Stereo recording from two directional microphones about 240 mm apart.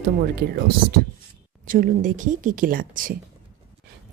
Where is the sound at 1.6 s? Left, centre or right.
Right.